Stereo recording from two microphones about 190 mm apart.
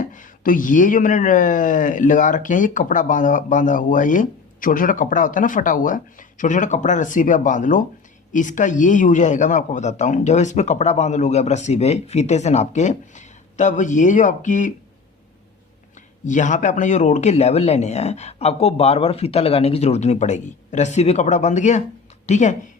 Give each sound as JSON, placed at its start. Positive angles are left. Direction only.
{"t": 0.0, "sound": "a man's voice", "side_deg": 45}
{"t": 16.2, "sound": "a man's voice", "side_deg": 40}